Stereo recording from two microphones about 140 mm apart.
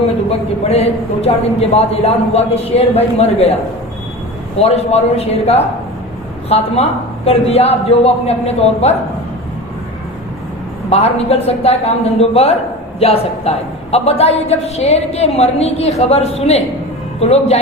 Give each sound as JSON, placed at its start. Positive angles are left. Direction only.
{"t": 0.3, "sound": "a woman's voice", "side_deg": 45}
{"t": 7.3, "sound": "a woman's voice", "side_deg": 45}
{"t": 10.8, "sound": "a woman's voice", "side_deg": 45}